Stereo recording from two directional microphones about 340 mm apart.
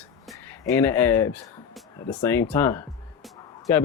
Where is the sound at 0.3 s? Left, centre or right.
Centre.